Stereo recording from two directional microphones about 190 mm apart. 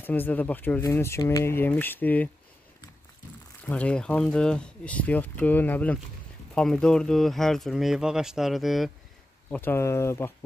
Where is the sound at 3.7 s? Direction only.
5° left (ahead or behind).